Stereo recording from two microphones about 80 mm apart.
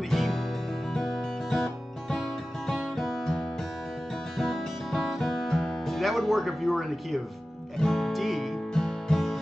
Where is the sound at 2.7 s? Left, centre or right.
Centre.